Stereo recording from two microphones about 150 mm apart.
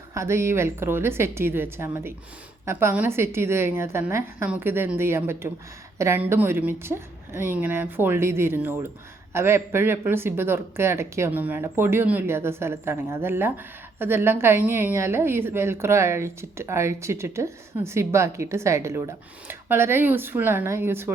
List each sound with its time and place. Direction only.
0.1 s speech: 20° right (ahead or behind)